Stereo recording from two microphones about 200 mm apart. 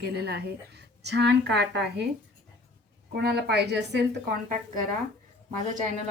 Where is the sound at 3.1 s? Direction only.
55° right (ahead or behind).